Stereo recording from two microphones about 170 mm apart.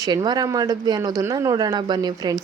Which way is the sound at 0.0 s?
25° right (ahead or behind).